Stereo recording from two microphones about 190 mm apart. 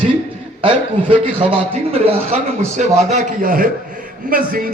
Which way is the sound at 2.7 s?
45° right (ahead or behind).